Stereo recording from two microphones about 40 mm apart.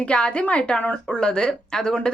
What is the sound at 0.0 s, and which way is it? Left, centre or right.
A woman's voice, left.